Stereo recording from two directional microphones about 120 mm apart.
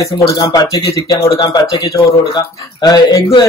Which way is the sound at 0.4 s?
35° left (ahead or behind).